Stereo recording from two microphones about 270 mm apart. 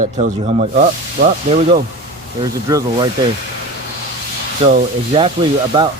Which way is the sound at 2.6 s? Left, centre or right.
Centre.